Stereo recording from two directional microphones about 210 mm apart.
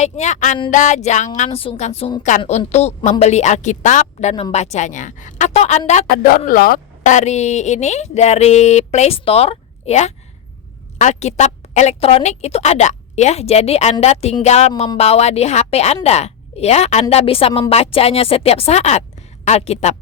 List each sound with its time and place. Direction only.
0.0 s a woman's voice: 35° left (ahead or behind)